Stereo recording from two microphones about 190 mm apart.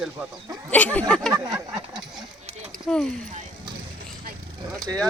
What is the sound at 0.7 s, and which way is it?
Speech, 10° left (ahead or behind).